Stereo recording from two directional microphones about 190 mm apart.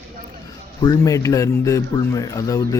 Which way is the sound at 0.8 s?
20° left (ahead or behind).